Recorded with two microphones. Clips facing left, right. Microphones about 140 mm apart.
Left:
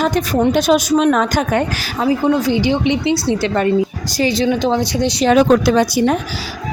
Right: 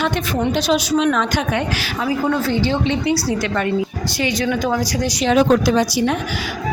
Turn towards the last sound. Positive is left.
turn(degrees=60)  # may be behind; listen again after turning